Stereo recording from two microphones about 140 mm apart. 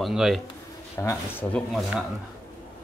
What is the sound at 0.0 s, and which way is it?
Speech, centre (ahead or behind).